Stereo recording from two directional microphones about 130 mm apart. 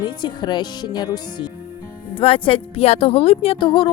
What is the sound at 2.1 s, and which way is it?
Speech, 45° left (ahead or behind).